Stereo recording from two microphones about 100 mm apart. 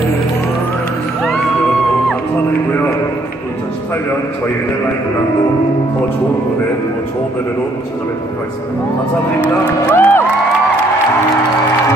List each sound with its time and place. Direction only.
9.8 s music: 20° left (ahead or behind)